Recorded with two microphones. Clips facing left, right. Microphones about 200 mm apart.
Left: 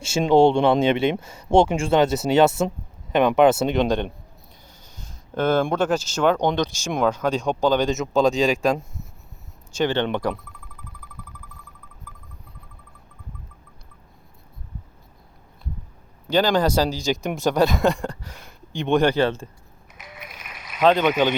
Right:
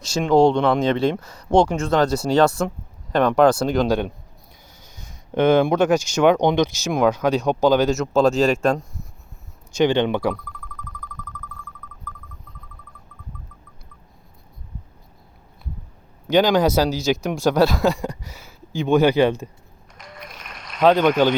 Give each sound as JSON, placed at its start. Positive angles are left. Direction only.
{"t": 0.0, "sound": "speech", "side_deg": 25}
{"t": 0.3, "sound": "speech", "side_deg": 5}
{"t": 0.6, "sound": "speech", "side_deg": 25}
{"t": 1.5, "sound": "speech", "side_deg": 5}
{"t": 1.8, "sound": "speech", "side_deg": 25}
{"t": 3.7, "sound": "speech", "side_deg": 0}
{"t": 5.3, "sound": "speech", "side_deg": -15}
{"t": 9.7, "sound": "speech", "side_deg": -15}
{"t": 11.5, "sound": "owl", "side_deg": 40}
{"t": 16.2, "sound": "speech", "side_deg": -10}
{"t": 20.0, "sound": "run", "side_deg": 5}
{"t": 21.0, "sound": "speech", "side_deg": 5}